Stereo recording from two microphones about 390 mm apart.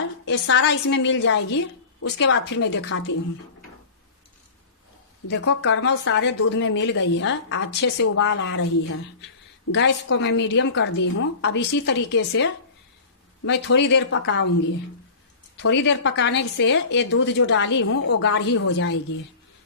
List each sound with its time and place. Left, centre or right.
0.3 s a woman's voice: left
5.3 s a woman's voice: left
15.6 s a woman's voice: left